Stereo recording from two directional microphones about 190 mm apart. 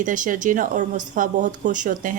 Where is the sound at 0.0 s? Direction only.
45° right (ahead or behind).